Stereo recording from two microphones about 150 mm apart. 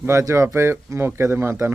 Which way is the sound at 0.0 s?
20° right (ahead or behind).